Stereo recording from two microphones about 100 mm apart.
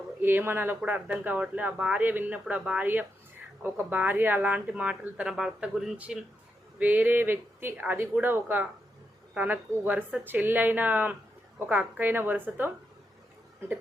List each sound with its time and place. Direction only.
0.2 s speech: 20° right (ahead or behind)